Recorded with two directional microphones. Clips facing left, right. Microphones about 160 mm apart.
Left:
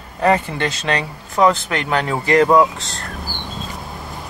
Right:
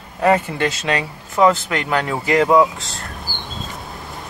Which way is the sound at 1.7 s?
30° left (ahead or behind).